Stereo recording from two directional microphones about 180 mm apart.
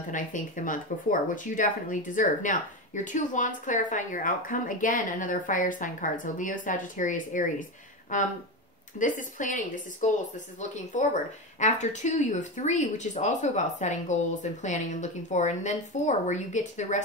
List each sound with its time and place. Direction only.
0.1 s speech: 45° left (ahead or behind)